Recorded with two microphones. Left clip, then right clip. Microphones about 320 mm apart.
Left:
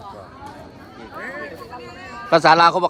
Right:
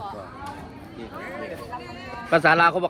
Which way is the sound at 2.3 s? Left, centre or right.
Centre.